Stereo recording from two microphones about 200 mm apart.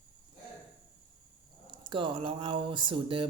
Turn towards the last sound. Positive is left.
turn(degrees=-25)  # may be behind; listen again after turning